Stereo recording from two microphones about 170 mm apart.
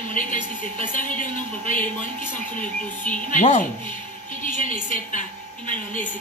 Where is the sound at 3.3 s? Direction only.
50° left (ahead or behind).